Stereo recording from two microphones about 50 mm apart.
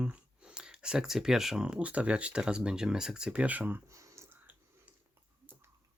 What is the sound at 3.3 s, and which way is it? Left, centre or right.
Speech, right.